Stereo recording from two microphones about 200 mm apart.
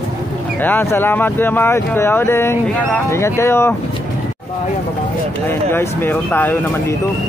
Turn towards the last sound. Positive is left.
turn(degrees=10)  # may be behind; listen again after turning